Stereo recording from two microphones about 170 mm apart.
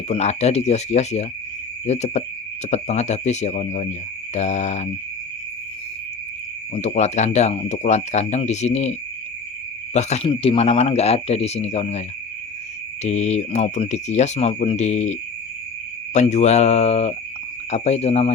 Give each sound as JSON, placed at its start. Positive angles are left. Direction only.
{"t": 0.1, "sound": "speech", "side_deg": 40}
{"t": 6.7, "sound": "speech", "side_deg": 40}
{"t": 16.1, "sound": "speech", "side_deg": 40}